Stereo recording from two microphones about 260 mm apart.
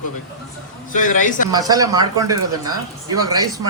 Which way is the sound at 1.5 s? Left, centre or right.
Centre.